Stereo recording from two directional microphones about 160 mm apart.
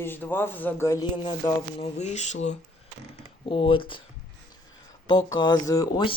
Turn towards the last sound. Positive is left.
turn(degrees=20)  # may be behind; listen again after turning